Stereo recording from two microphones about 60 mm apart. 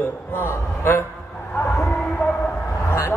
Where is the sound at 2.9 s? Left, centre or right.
Left.